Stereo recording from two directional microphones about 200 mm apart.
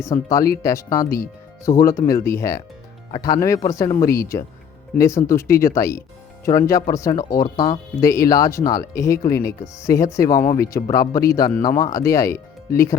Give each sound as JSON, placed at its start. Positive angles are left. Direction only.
{"t": 0.0, "sound": "speech", "side_deg": 15}